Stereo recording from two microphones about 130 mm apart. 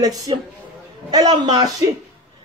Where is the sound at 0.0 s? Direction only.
30° right (ahead or behind).